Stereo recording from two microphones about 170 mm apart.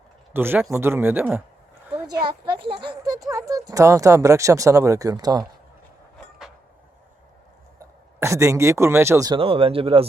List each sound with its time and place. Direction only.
0.3 s speech: 10° right (ahead or behind)
2.2 s speech: 30° right (ahead or behind)
7.8 s speech: 15° right (ahead or behind)
9.4 s speech: 35° right (ahead or behind)